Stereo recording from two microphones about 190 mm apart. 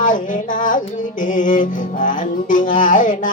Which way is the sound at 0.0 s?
45° left (ahead or behind).